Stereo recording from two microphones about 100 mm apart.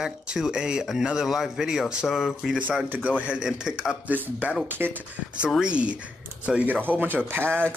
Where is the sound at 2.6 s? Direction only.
15° right (ahead or behind).